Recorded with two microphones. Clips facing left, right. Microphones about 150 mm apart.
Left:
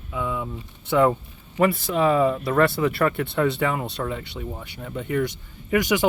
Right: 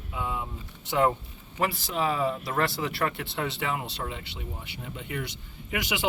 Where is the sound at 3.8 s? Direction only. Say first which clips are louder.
Left 7 dB; 50° left (ahead or behind).